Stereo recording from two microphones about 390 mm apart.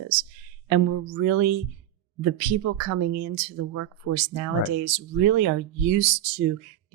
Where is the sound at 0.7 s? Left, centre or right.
Right.